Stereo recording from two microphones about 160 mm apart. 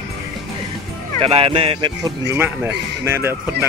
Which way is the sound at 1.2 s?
35° right (ahead or behind).